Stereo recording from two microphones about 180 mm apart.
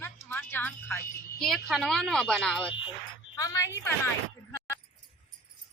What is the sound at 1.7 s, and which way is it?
Speech, centre (ahead or behind).